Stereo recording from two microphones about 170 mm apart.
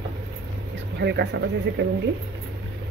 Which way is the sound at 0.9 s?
80° right.